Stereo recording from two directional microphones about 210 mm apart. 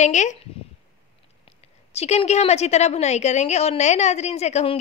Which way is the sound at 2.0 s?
30° left (ahead or behind).